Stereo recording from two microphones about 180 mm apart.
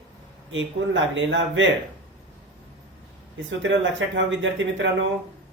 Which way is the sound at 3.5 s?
90° right.